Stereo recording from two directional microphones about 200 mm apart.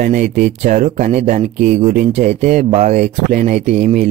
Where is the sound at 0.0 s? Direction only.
40° right (ahead or behind).